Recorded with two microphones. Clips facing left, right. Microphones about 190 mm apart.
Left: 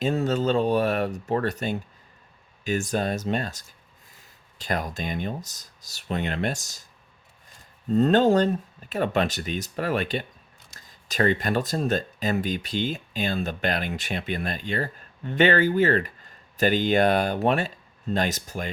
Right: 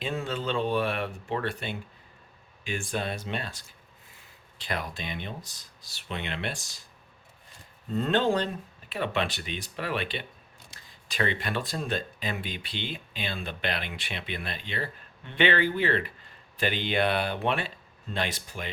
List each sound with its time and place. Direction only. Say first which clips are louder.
0.0 s speech: left 8 dB; 40° left (ahead or behind)
7.9 s speech: left 7 dB; 40° left (ahead or behind)